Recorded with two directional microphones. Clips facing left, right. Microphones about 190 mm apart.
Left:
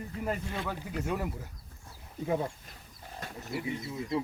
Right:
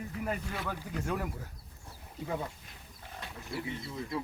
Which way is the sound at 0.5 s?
20° left (ahead or behind).